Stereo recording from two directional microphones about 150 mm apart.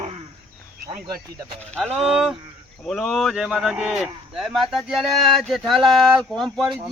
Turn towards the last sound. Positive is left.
turn(degrees=0)  # may be behind; listen again after turning